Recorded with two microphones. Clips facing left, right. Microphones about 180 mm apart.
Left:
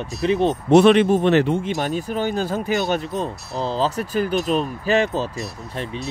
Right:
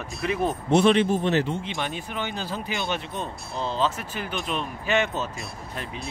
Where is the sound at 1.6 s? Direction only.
40° left (ahead or behind).